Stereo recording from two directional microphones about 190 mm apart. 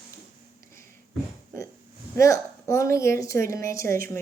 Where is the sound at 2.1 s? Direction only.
15° left (ahead or behind).